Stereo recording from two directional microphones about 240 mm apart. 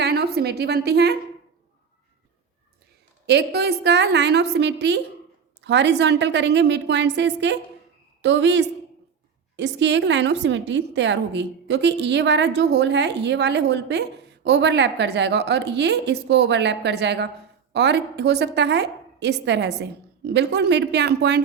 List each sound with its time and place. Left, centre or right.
0.0 s a woman's voice: right
3.2 s a woman's voice: right